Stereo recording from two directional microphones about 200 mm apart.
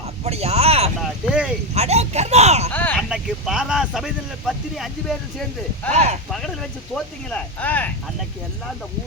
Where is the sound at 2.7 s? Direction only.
10° left (ahead or behind).